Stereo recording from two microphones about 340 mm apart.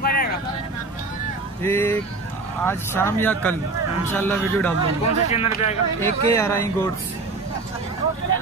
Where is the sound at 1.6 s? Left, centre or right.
Centre.